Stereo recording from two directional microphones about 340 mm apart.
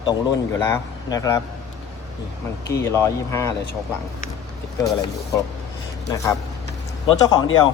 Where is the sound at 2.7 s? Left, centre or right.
Centre.